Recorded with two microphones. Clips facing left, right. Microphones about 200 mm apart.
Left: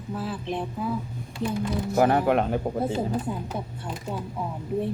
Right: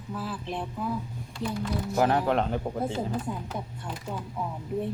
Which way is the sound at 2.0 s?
10° left (ahead or behind).